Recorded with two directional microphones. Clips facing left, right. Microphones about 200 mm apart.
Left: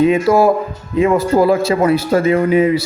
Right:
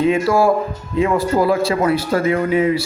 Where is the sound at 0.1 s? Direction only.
20° left (ahead or behind).